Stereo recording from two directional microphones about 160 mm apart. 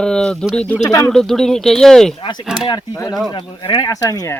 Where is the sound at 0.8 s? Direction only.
20° left (ahead or behind).